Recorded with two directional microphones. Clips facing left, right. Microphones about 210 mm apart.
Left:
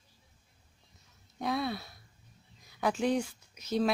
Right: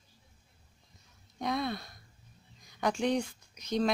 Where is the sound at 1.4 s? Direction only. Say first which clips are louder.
Even; 5° left (ahead or behind).